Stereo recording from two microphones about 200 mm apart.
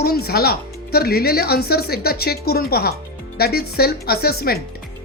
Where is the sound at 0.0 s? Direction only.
50° left (ahead or behind).